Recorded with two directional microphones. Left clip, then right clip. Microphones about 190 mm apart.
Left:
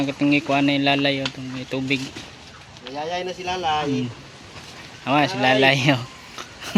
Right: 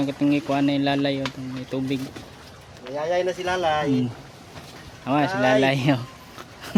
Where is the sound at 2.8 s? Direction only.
35° right (ahead or behind).